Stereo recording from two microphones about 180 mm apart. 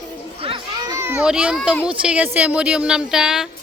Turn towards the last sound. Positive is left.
turn(degrees=-5)  # may be behind; listen again after turning